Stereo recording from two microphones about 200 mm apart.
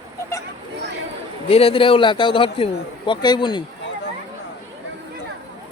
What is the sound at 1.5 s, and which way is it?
A man's voice, 30° left (ahead or behind).